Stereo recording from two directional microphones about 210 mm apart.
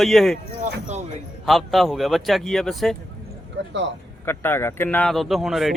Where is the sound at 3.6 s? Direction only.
55° right (ahead or behind).